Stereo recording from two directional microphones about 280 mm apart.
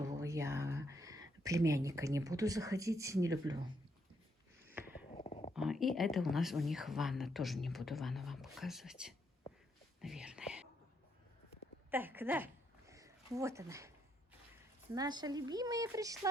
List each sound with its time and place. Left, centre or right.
0.2 s speech: centre
4.6 s a sound: centre
5.1 s whispering: left
5.5 s speech: centre
10.0 s whispering: centre
11.9 s speech: centre
12.9 s a sound: centre
14.9 s speech: centre